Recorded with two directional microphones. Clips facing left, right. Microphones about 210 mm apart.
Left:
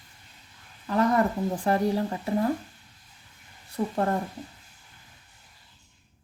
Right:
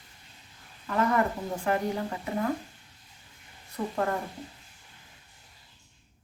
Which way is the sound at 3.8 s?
35° left (ahead or behind).